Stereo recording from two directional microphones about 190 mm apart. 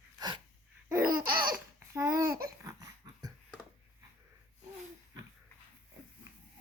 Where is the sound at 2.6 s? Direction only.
20° right (ahead or behind).